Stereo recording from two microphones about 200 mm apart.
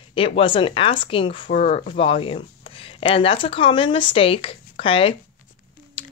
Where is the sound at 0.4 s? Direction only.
25° left (ahead or behind).